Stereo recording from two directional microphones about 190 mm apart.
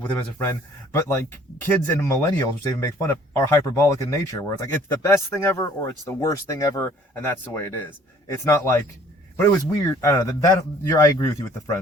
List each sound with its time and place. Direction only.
0.9 s speech: 15° left (ahead or behind)